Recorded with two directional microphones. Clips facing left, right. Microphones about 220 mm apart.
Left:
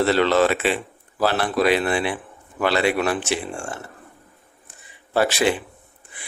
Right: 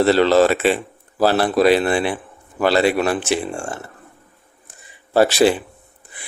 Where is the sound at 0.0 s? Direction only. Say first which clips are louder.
Right 4 dB; 35° right (ahead or behind).